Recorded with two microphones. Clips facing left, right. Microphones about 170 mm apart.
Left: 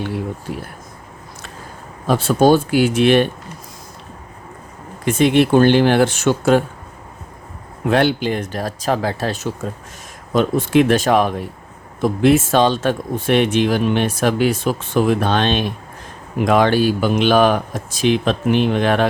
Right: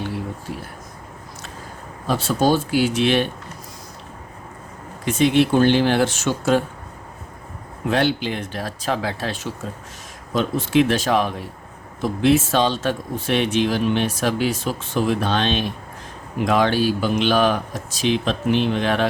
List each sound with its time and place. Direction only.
2.0 s speech: 55° left (ahead or behind)
5.0 s speech: 55° left (ahead or behind)
7.9 s speech: 55° left (ahead or behind)